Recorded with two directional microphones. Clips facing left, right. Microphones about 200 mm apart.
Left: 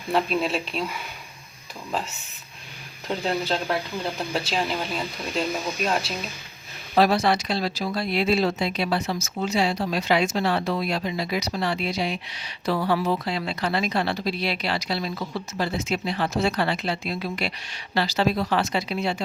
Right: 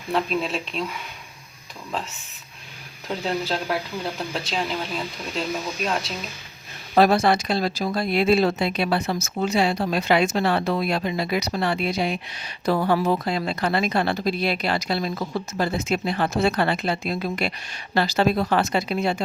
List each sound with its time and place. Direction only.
0.1 s speech: centre (ahead or behind)
3.1 s speech: centre (ahead or behind)
6.9 s speech: 50° right (ahead or behind)